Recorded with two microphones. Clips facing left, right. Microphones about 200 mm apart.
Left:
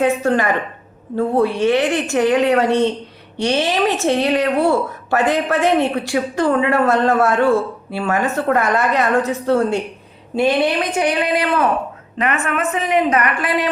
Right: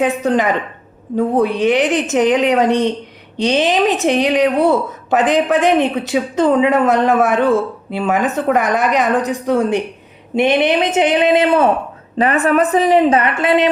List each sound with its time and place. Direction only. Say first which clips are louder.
0.0 s a woman's voice: right 1 dB; 15° right (ahead or behind)